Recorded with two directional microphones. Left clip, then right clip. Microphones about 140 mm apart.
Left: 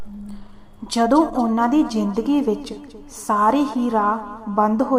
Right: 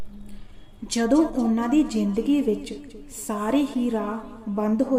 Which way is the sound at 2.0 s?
15° right (ahead or behind).